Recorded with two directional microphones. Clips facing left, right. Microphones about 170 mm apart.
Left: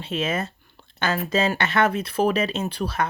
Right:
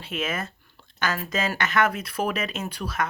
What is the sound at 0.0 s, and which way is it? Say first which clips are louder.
Speech: left 4 dB; 30° left (ahead or behind).